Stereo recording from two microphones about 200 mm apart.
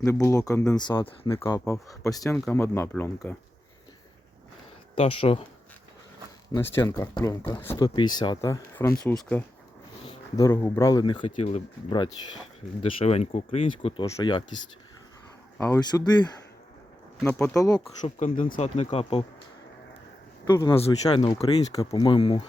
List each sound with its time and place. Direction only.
0.0 s speech: 15° left (ahead or behind)
1.5 s speech: 15° left (ahead or behind)
4.9 s speech: 30° left (ahead or behind)
6.7 s speech: 15° left (ahead or behind); by 11.6 s 35° left (ahead or behind)
11.9 s speech: 20° left (ahead or behind)
15.5 s speech: 15° left (ahead or behind)
17.2 s speech: 5° left (ahead or behind)
17.5 s speech: 15° left (ahead or behind)
18.2 s speech: 40° left (ahead or behind)
20.5 s speech: 20° left (ahead or behind)